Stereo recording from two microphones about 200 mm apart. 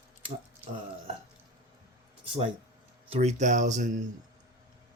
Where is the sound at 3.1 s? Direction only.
35° right (ahead or behind).